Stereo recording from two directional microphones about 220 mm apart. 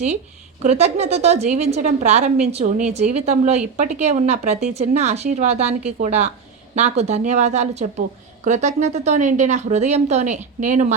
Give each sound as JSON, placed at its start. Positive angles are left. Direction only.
{"t": 0.6, "sound": "a woman's voice", "side_deg": -30}